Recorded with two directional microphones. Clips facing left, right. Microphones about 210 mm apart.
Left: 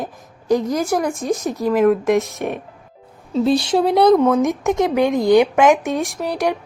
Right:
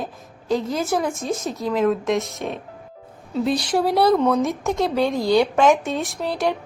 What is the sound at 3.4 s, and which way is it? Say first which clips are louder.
A woman's voice: left 4 dB; 25° left (ahead or behind).